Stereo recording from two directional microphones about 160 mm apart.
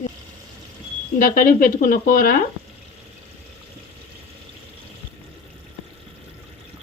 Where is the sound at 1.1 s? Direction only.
60° left (ahead or behind).